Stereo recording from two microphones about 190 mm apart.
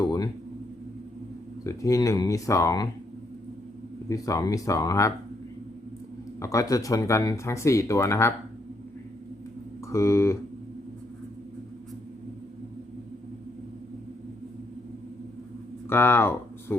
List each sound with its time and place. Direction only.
0.0 s a sound: 20° left (ahead or behind)
1.6 s speech: 15° left (ahead or behind)
4.1 s speech: 15° left (ahead or behind)
6.4 s speech: 15° left (ahead or behind)
9.9 s speech: 15° left (ahead or behind)
15.9 s speech: 10° left (ahead or behind)